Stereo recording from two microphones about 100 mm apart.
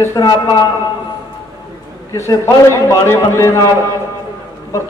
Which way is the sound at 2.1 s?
30° left (ahead or behind).